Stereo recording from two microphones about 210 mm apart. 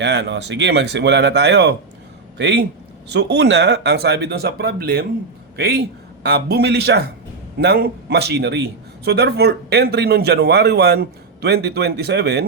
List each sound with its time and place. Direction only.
0.0 s speech: 55° right (ahead or behind)
3.1 s speech: 55° right (ahead or behind)